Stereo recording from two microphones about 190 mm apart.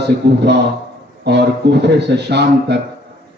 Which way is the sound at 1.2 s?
60° right (ahead or behind).